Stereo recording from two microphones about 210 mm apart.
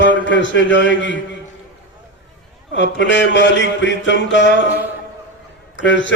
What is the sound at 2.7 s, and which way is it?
A man's voice, 60° left (ahead or behind).